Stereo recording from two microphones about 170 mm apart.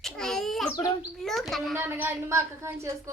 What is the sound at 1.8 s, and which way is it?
Speech, 15° right (ahead or behind).